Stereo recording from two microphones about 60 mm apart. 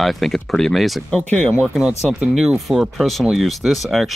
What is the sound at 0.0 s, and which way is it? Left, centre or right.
Speech, centre.